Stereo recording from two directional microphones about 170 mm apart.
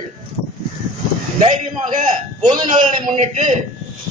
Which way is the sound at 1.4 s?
40° right (ahead or behind).